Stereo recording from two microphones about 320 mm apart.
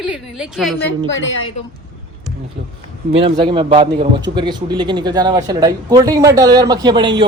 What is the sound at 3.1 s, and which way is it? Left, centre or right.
A woman's voice, centre.